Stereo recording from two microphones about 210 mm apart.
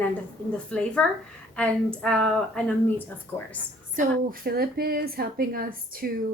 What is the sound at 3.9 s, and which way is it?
A woman's voice, 40° right (ahead or behind).